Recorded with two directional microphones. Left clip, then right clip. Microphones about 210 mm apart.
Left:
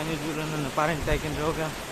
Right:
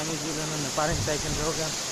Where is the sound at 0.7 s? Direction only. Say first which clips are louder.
Left 2 dB; 20° left (ahead or behind).